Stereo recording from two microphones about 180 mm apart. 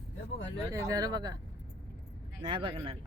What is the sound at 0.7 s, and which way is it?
Speech, 20° right (ahead or behind).